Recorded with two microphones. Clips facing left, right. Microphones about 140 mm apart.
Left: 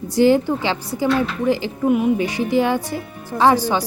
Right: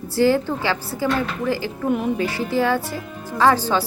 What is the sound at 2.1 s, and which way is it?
A woman's voice, 15° left (ahead or behind).